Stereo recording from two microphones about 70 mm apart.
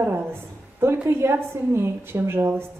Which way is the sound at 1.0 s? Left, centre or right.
Right.